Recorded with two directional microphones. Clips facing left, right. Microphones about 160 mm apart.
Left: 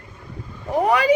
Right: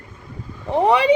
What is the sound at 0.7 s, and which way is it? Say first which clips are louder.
Speech: right 2 dB; 30° right (ahead or behind).